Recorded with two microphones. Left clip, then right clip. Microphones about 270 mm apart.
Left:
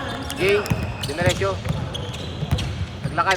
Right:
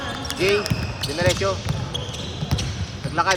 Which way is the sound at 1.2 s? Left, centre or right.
Centre.